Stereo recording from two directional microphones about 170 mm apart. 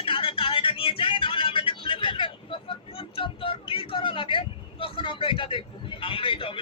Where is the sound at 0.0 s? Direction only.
30° left (ahead or behind).